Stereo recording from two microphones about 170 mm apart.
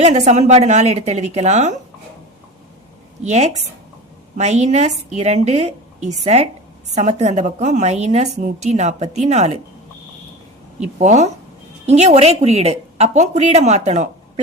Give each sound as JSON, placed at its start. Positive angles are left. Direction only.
{"t": 0.0, "sound": "speech", "side_deg": -40}
{"t": 3.2, "sound": "a woman's voice", "side_deg": -40}
{"t": 10.8, "sound": "a woman's voice", "side_deg": -40}